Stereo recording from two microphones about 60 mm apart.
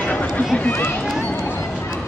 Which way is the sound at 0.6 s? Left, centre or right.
Left.